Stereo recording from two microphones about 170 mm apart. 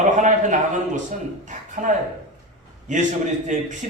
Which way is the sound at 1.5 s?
50° right (ahead or behind).